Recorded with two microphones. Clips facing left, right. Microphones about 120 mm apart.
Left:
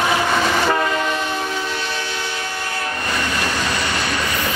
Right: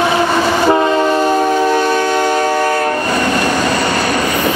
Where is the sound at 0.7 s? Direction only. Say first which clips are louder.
Right 8 dB; 30° right (ahead or behind).